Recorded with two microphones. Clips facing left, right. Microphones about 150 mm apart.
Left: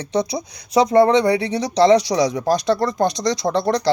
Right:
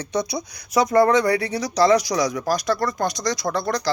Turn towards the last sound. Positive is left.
turn(degrees=30)  # may be behind; listen again after turning